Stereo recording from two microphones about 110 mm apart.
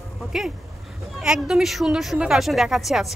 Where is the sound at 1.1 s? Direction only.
5° right (ahead or behind).